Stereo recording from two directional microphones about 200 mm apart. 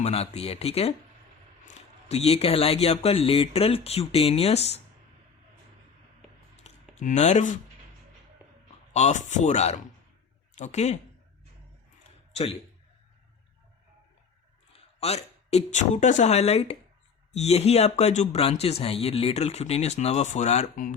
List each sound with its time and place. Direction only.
0.0 s speech: 30° left (ahead or behind)
6.6 s a sound: 35° left (ahead or behind)
8.9 s speech: 35° left (ahead or behind)
12.3 s a man's voice: 30° left (ahead or behind)
14.7 s speech: 30° left (ahead or behind)